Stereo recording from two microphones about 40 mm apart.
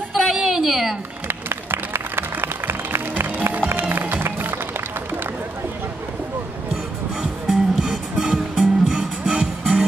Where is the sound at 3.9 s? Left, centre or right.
Right.